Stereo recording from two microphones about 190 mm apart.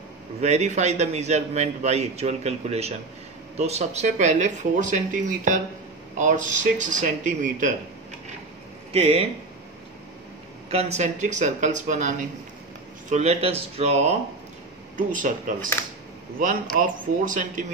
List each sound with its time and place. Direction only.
0.4 s a man's voice: 35° right (ahead or behind)
8.9 s a man's voice: 30° right (ahead or behind)
10.7 s a man's voice: 35° right (ahead or behind)
16.7 s speech: 45° right (ahead or behind)